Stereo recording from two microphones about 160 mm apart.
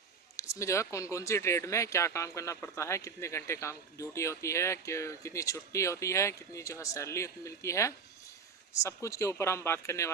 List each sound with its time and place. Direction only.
0.3 s speech: 20° left (ahead or behind)